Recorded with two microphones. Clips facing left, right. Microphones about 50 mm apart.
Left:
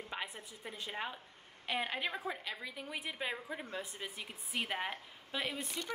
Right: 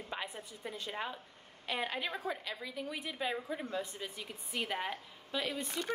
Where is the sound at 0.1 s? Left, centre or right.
Centre.